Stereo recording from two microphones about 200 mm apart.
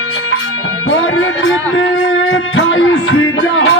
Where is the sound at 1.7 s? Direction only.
75° left (ahead or behind).